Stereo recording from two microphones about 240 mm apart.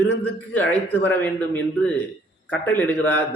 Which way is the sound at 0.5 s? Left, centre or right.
Centre.